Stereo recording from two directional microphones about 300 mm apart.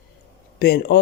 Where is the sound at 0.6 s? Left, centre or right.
Left.